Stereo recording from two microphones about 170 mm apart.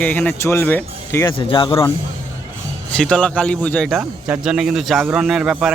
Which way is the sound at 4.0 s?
10° right (ahead or behind).